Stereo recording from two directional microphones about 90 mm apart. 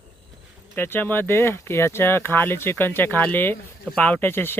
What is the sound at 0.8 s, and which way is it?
Speech, 25° left (ahead or behind).